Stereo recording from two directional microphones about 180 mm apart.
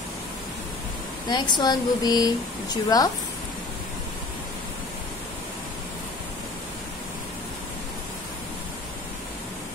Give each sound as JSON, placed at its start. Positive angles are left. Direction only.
{"t": 1.3, "sound": "speech", "side_deg": 25}